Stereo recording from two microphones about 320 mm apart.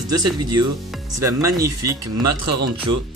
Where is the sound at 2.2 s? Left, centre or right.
Right.